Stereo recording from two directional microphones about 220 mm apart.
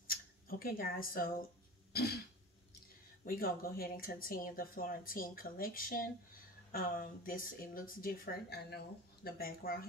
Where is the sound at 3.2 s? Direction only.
40° left (ahead or behind).